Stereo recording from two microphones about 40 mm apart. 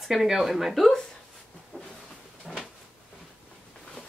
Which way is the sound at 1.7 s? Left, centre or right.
Right.